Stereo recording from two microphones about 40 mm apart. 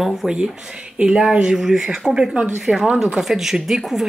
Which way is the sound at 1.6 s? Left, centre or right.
Centre.